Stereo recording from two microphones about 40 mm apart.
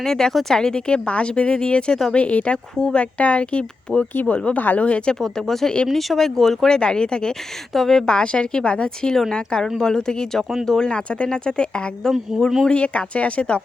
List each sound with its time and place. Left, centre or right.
0.0 s speech: centre; by 4.0 s left
4.1 s speech: left
4.8 s speech: left
5.2 s speech: centre
6.7 s speech: left
7.7 s speech: centre; by 11.9 s left
12.3 s speech: centre
12.7 s speech: left